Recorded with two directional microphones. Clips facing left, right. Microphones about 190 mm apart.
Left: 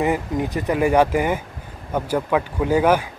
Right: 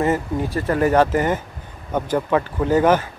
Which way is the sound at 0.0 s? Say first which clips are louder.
Right 1 dB; 15° left (ahead or behind).